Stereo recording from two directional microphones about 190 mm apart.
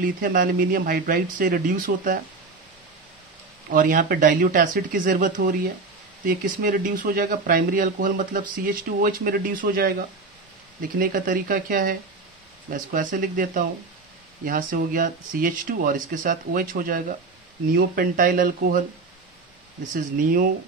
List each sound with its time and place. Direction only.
0.0 s speech: 45° right (ahead or behind)
3.7 s speech: 45° right (ahead or behind)